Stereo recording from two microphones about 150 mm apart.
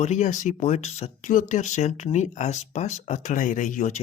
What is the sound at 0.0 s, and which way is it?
Speech, 55° left (ahead or behind).